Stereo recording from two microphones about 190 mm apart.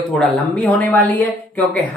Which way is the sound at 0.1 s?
5° left (ahead or behind).